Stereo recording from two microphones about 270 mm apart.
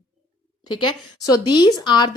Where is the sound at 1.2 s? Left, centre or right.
Centre.